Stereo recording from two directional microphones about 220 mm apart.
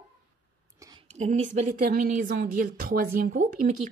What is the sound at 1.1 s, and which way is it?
Speech, 35° right (ahead or behind).